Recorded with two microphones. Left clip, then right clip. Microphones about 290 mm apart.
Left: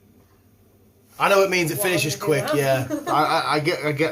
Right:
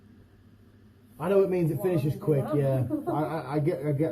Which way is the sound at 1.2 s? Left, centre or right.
Centre.